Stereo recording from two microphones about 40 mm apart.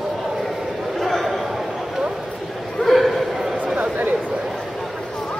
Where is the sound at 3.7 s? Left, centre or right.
Right.